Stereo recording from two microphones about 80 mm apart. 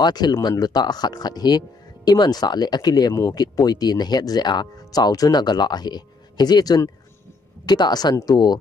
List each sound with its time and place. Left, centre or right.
0.0 s speech: left
3.1 s speech: left